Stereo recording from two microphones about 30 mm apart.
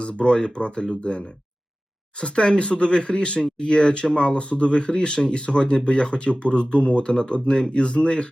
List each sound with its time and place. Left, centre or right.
0.0 s speech: left